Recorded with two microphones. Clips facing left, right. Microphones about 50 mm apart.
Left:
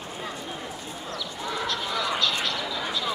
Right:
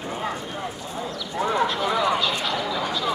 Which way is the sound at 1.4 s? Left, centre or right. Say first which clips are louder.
Right 11 dB; right.